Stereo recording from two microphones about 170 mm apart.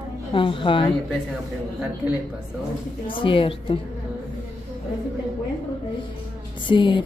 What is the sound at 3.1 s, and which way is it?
Speech, 30° left (ahead or behind).